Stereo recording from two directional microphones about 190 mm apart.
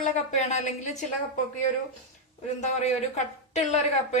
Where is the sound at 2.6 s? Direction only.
35° left (ahead or behind).